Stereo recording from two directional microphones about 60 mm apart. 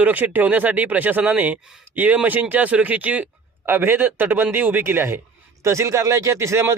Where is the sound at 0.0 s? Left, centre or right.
Right.